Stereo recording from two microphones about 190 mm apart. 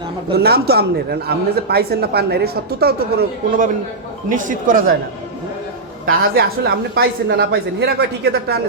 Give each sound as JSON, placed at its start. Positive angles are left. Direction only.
{"t": 0.3, "sound": "a woman's voice", "side_deg": -55}
{"t": 4.3, "sound": "speech", "side_deg": -45}
{"t": 6.1, "sound": "a woman's voice", "side_deg": -55}